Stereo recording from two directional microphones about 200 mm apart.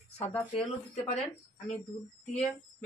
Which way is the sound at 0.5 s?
30° left (ahead or behind).